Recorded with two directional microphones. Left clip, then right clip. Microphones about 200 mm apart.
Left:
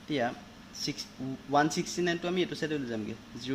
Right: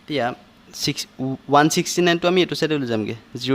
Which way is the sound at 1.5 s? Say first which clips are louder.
Right 11 dB; 50° right (ahead or behind).